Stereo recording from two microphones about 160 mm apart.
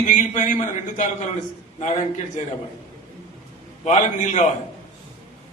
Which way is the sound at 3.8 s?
50° left (ahead or behind).